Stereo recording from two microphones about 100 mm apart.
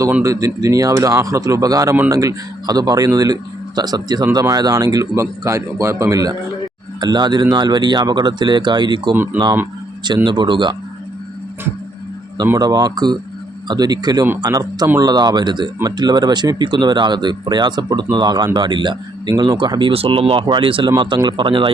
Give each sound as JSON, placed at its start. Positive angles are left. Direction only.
{"t": 0.2, "sound": "speech", "side_deg": -35}
{"t": 7.0, "sound": "speech", "side_deg": -45}
{"t": 9.1, "sound": "speech", "side_deg": -20}
{"t": 10.2, "sound": "speech", "side_deg": -50}
{"t": 12.5, "sound": "speech", "side_deg": -40}
{"t": 19.9, "sound": "speech", "side_deg": -70}
{"t": 21.0, "sound": "speech", "side_deg": -50}